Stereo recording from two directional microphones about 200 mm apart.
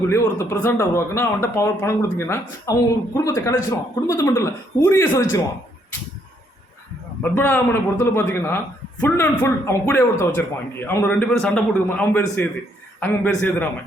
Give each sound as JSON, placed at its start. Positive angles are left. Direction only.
{"t": 0.1, "sound": "a man's voice", "side_deg": 10}
{"t": 7.2, "sound": "a man's voice", "side_deg": 10}